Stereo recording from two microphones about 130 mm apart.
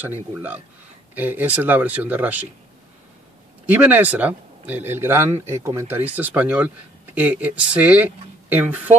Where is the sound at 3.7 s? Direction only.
15° right (ahead or behind).